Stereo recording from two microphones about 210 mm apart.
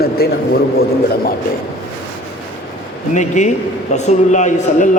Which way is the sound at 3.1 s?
35° left (ahead or behind).